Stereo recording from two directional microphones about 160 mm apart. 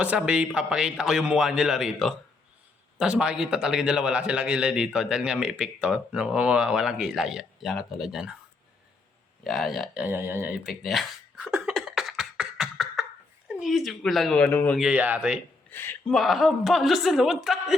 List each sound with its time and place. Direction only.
0.0 s a man's voice: 5° right (ahead or behind)
9.4 s a sound: centre (ahead or behind)
13.6 s a man's voice: centre (ahead or behind)
14.8 s a man's voice: 5° right (ahead or behind)
15.7 s speech: 15° left (ahead or behind)
16.0 s a man's voice: centre (ahead or behind)